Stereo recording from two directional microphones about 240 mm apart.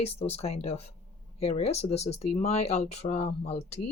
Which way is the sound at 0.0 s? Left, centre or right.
Left.